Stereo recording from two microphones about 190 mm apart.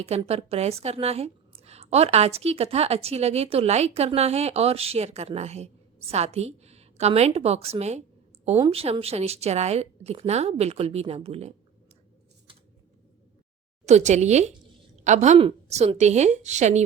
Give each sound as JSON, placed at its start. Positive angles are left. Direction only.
{"t": 0.0, "sound": "a woman's voice", "side_deg": -30}
{"t": 13.8, "sound": "a woman's voice", "side_deg": -35}